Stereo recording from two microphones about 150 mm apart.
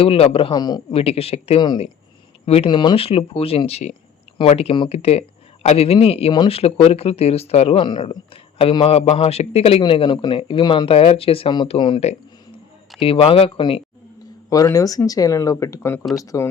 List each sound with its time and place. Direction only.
0.0 s speech: 40° left (ahead or behind)
0.9 s speech: 40° left (ahead or behind)
2.6 s speech: 30° left (ahead or behind)
14.5 s speech: 20° left (ahead or behind)